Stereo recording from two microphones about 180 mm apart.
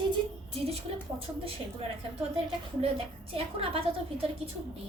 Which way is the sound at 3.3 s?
30° right (ahead or behind).